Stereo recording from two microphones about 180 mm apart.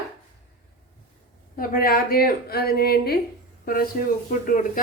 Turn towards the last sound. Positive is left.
turn(degrees=50)  # may be behind; listen again after turning